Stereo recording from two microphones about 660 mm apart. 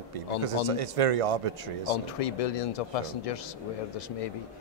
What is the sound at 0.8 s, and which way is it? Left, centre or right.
Speech, right.